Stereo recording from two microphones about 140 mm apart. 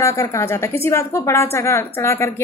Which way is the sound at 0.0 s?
20° left (ahead or behind).